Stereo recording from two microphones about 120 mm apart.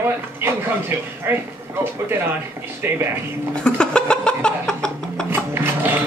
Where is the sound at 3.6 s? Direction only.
5° left (ahead or behind).